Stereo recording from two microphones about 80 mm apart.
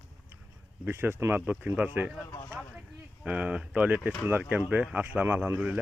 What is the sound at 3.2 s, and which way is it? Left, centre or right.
Speech, centre.